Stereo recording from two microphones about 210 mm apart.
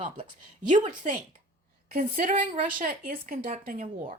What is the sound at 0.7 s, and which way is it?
Speech, 35° right (ahead or behind).